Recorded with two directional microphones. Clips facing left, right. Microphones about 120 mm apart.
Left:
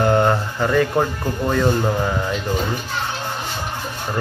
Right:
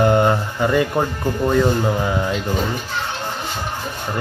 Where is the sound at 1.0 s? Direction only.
Centre (ahead or behind).